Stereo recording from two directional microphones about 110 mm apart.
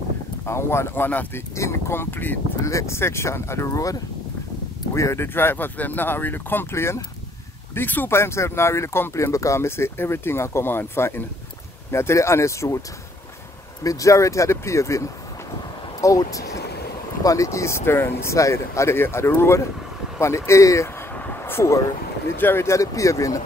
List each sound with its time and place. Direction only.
0.5 s speech: 25° left (ahead or behind)
13.8 s speech: 30° left (ahead or behind)
21.3 s a sound: 20° left (ahead or behind)
22.4 s speech: 20° left (ahead or behind)